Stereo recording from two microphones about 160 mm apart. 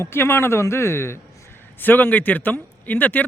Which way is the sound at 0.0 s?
15° left (ahead or behind).